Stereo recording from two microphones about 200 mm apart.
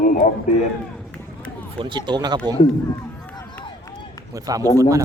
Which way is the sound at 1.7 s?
25° right (ahead or behind).